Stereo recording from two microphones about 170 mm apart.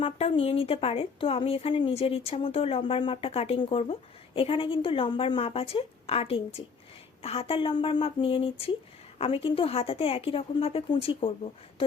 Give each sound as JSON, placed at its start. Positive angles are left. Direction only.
{"t": 0.0, "sound": "a woman's voice", "side_deg": 35}